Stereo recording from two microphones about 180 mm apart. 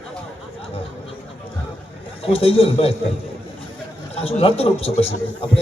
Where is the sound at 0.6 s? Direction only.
30° left (ahead or behind).